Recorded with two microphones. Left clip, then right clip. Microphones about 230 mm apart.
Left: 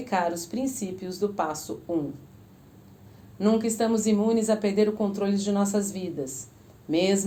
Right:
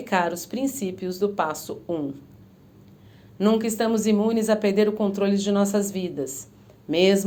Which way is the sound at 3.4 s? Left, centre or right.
Right.